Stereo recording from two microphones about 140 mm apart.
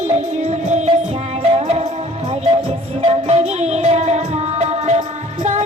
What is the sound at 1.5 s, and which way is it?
Music, 45° right (ahead or behind).